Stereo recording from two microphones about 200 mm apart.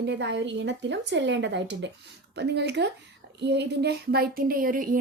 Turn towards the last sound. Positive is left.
turn(degrees=-45)  # may be behind; listen again after turning